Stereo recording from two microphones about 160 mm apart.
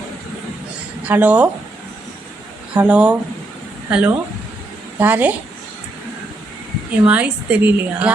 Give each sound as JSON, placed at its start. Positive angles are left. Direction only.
{"t": 1.0, "sound": "a woman's voice", "side_deg": -10}
{"t": 2.7, "sound": "a woman's voice", "side_deg": -5}
{"t": 7.0, "sound": "a woman's voice", "side_deg": -10}